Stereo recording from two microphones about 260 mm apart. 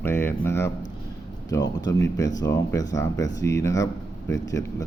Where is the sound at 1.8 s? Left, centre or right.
Centre.